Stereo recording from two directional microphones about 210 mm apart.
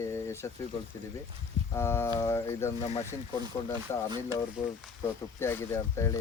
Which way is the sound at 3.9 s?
10° left (ahead or behind).